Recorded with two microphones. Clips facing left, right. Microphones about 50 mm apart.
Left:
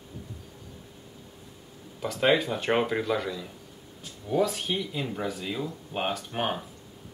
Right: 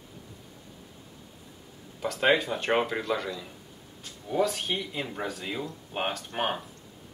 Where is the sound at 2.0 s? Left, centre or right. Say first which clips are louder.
Right 1 dB; centre.